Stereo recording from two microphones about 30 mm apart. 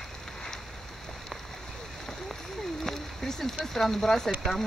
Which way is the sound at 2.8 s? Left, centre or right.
Centre.